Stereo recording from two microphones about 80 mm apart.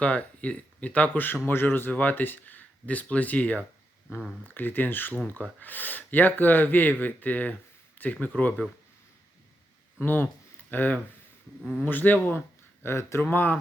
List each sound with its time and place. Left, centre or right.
0.0 s speech: centre
4.1 s speech: left
10.0 s speech: left
11.6 s a man's voice: centre
11.9 s speech: left
12.8 s speech: left